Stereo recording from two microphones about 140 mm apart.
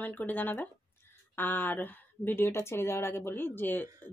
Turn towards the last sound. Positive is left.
turn(degrees=15)  # may be behind; listen again after turning